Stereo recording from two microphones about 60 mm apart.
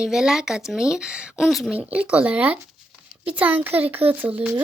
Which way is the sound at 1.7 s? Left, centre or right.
Right.